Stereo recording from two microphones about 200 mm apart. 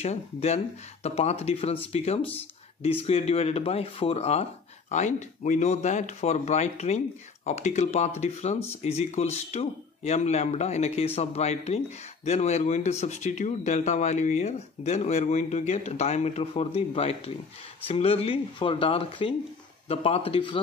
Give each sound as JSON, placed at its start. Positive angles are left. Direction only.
{"t": 0.0, "sound": "speech", "side_deg": 35}